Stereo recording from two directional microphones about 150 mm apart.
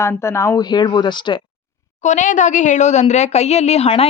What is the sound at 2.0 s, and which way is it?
A woman's voice, 55° left (ahead or behind).